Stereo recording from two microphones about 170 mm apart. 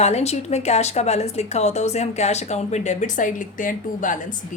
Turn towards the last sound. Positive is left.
turn(degrees=50)  # may be behind; listen again after turning